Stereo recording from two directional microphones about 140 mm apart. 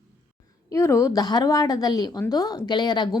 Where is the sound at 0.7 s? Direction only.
20° left (ahead or behind).